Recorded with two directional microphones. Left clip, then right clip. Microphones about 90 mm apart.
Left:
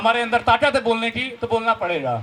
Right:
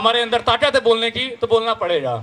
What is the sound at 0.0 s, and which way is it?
A man's voice, 40° right (ahead or behind).